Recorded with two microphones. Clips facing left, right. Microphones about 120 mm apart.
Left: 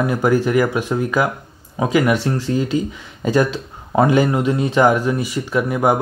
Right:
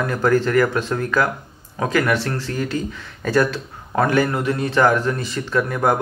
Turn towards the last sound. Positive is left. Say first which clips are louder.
# left 2 dB
turn(degrees=15)  # may be behind; listen again after turning